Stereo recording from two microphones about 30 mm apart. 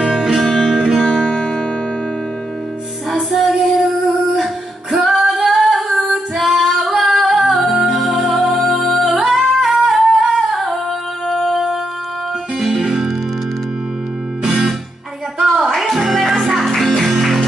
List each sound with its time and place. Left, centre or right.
0.3 s music: centre
1.3 s music: centre
3.1 s music: centre
5.0 s female singing: centre
5.8 s female singing: centre
7.0 s singing: centre
7.4 s music: centre
9.6 s singing: centre
12.5 s music: centre
14.4 s music: centre